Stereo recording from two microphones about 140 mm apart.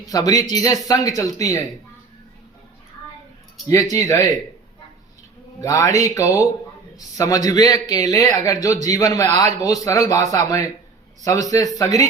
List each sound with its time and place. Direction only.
0.1 s a man's voice: 25° left (ahead or behind)
3.7 s a man's voice: 25° left (ahead or behind)
5.5 s a man's voice: 25° left (ahead or behind)